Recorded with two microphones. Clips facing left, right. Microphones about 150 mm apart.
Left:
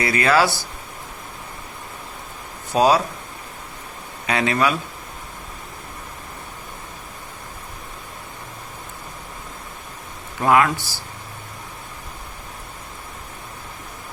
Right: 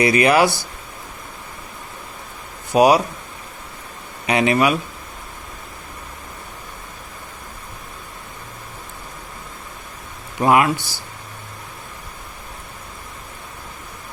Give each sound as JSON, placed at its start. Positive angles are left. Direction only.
{"t": 0.0, "sound": "speech", "side_deg": -20}
{"t": 2.7, "sound": "speech", "side_deg": -15}
{"t": 4.3, "sound": "speech", "side_deg": -20}
{"t": 10.4, "sound": "speech", "side_deg": -20}